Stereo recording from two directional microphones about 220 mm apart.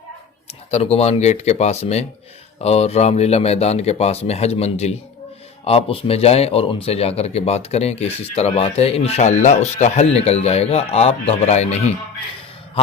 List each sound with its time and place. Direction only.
0.4 s speech: 30° left (ahead or behind)